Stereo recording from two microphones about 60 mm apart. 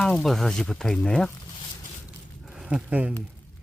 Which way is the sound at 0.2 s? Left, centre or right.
Centre.